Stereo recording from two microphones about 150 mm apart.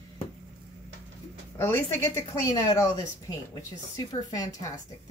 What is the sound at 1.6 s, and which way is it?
Speech, 15° left (ahead or behind).